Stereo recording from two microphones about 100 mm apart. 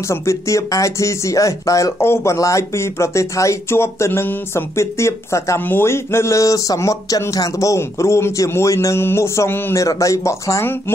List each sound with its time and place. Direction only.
0.1 s speech: 30° left (ahead or behind)
9.8 s speech: 35° left (ahead or behind)